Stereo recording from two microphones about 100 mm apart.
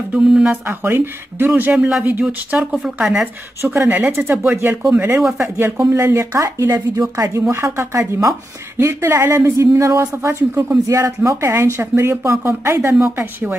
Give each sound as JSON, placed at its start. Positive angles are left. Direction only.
{"t": 0.1, "sound": "speech", "side_deg": -10}
{"t": 0.7, "sound": "a woman's voice", "side_deg": -20}
{"t": 1.7, "sound": "speech", "side_deg": -5}
{"t": 3.6, "sound": "a woman's voice", "side_deg": -20}